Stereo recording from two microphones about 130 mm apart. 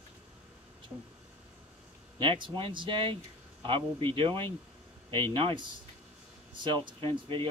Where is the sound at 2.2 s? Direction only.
40° right (ahead or behind).